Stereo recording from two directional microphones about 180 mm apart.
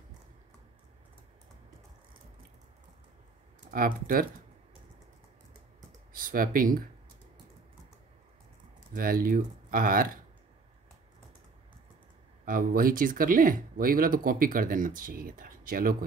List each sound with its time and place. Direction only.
3.7 s speech: 55° right (ahead or behind)
6.1 s speech: 50° right (ahead or behind)
8.9 s speech: 55° right (ahead or behind)
12.4 s speech: 50° right (ahead or behind)